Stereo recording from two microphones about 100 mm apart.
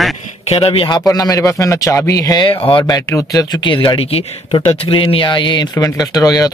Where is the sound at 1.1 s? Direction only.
35° left (ahead or behind).